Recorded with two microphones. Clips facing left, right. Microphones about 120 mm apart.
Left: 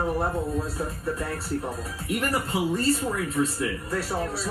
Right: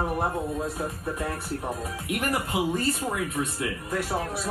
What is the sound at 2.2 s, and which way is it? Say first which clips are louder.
Speech: even; 20° right (ahead or behind).